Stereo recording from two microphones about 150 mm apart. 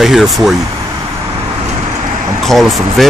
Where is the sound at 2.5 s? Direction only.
Centre (ahead or behind).